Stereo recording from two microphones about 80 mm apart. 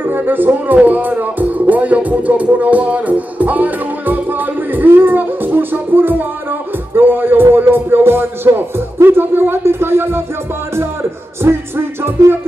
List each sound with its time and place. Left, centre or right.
0.0 s speech: right
6.9 s music: right